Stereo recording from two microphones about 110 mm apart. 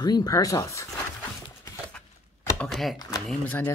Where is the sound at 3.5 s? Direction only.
15° left (ahead or behind).